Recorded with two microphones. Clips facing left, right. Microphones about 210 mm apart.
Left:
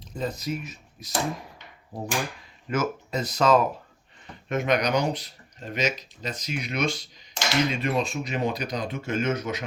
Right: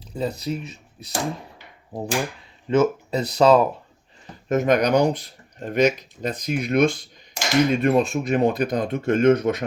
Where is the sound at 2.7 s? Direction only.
30° right (ahead or behind).